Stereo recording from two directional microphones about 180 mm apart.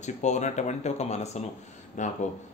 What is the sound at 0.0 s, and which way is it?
Speech, 40° left (ahead or behind).